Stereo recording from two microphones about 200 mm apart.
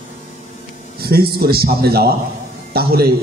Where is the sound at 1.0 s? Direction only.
50° right (ahead or behind).